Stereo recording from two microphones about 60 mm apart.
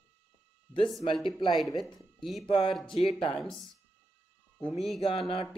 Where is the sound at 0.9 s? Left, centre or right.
Centre.